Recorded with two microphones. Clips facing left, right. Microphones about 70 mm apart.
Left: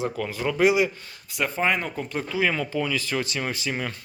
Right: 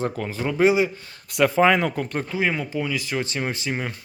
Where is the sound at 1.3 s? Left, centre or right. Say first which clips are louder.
Right 7 dB; right.